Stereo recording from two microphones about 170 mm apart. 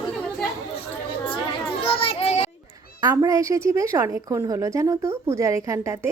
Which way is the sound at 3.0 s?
20° right (ahead or behind).